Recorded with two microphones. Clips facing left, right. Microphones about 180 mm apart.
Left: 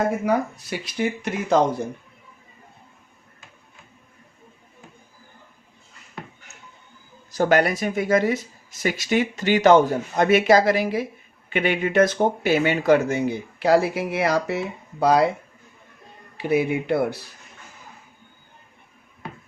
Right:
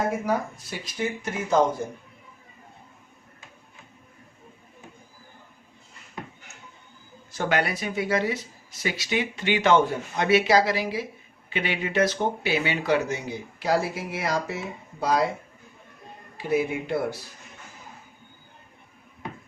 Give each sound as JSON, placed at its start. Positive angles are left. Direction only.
{"t": 0.3, "sound": "speech", "side_deg": 65}
{"t": 7.3, "sound": "speech", "side_deg": 40}
{"t": 16.4, "sound": "speech", "side_deg": 65}